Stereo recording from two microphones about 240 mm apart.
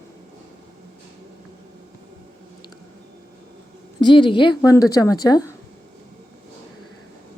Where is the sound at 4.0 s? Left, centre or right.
Centre.